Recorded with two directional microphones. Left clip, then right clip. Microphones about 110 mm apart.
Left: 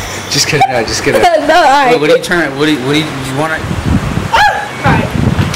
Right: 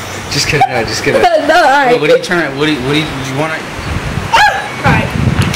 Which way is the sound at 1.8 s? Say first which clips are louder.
Left 1 dB; 20° left (ahead or behind).